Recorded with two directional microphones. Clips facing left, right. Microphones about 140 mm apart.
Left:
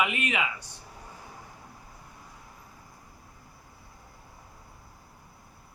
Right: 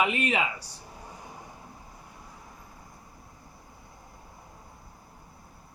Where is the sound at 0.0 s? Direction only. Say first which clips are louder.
Right 2 dB; 35° right (ahead or behind).